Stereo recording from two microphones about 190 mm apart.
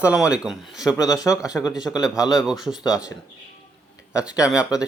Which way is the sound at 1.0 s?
20° left (ahead or behind).